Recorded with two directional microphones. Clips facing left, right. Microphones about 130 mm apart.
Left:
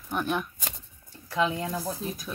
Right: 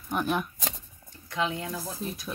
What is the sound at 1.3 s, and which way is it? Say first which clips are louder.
Speech: left 3 dB; 35° left (ahead or behind).